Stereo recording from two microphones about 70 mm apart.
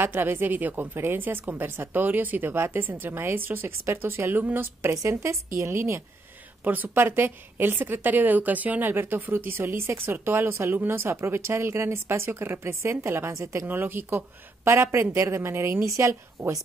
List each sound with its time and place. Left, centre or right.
0.0 s a woman's voice: right
4.9 s a woman's voice: right
6.6 s a woman's voice: right
13.7 s a woman's voice: right